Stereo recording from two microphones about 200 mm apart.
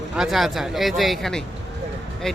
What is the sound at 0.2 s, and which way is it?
Speech, centre (ahead or behind).